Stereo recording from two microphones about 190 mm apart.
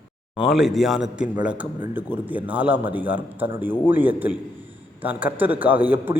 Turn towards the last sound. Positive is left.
turn(degrees=-10)  # may be behind; listen again after turning